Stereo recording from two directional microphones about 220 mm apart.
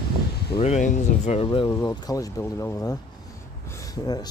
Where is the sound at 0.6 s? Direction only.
30° left (ahead or behind).